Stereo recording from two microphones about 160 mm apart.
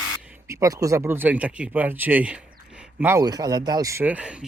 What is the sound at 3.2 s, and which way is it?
Speech, 25° right (ahead or behind).